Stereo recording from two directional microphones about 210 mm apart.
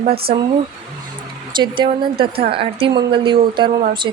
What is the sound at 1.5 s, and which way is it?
Speech, 20° right (ahead or behind).